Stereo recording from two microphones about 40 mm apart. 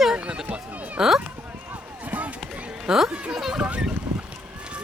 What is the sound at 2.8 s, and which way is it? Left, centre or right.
Speech, centre.